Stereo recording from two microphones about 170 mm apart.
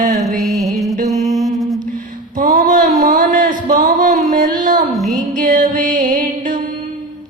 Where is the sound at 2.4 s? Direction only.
50° right (ahead or behind).